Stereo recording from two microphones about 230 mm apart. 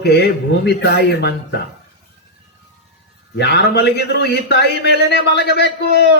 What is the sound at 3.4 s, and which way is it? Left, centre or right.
A man's voice, left.